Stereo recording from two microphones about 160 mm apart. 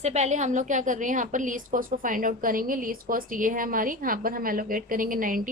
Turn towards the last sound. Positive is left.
turn(degrees=-60)  # may be behind; listen again after turning